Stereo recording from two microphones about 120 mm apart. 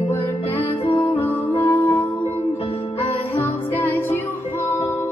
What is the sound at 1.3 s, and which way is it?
Music, 20° left (ahead or behind).